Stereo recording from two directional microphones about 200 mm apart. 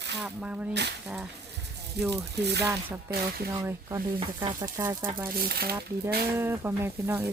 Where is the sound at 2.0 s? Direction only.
55° right (ahead or behind).